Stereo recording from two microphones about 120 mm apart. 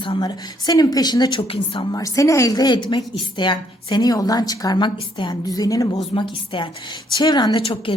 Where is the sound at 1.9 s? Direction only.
30° left (ahead or behind).